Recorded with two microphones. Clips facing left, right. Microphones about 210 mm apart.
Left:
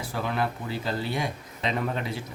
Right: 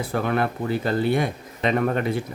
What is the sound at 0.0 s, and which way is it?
Speech, 55° right (ahead or behind).